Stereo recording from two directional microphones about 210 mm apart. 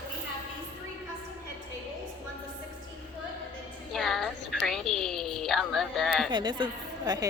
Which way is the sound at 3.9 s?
Centre (ahead or behind).